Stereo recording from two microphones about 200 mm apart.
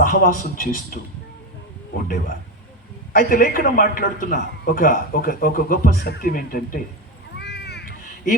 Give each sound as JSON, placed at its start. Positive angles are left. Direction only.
{"t": 0.0, "sound": "a man's voice", "side_deg": 45}
{"t": 1.9, "sound": "a man's voice", "side_deg": 45}
{"t": 7.3, "sound": "crow", "side_deg": 55}